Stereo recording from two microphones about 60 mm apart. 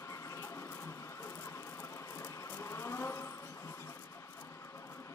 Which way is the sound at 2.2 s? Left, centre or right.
Left.